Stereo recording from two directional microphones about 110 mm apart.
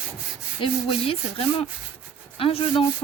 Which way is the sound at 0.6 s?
60° left (ahead or behind).